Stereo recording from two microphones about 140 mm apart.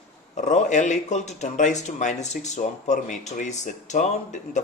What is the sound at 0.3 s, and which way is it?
Speech, 60° left (ahead or behind).